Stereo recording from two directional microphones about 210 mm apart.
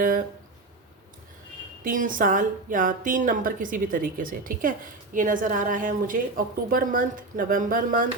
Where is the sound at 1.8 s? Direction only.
40° right (ahead or behind).